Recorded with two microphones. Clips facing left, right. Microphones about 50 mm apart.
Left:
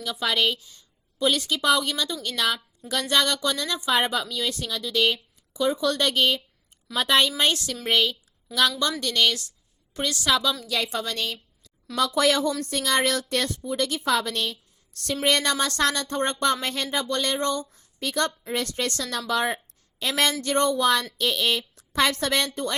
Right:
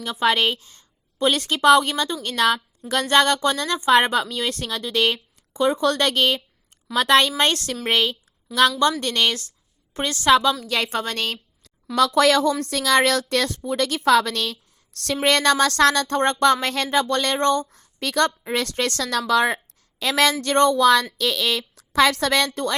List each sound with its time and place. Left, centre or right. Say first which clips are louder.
0.0 s a woman's voice: right 4 dB; right
8.8 s a woman's voice: right 4 dB; right
11.9 s a woman's voice: right 5 dB; right